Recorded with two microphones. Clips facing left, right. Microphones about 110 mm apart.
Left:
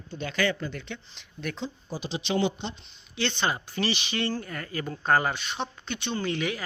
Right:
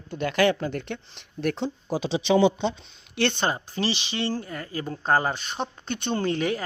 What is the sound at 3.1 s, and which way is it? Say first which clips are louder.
Speech: right 4 dB; 55° right (ahead or behind).